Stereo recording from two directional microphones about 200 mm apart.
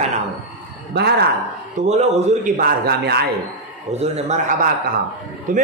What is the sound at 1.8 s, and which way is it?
Speech, 35° right (ahead or behind).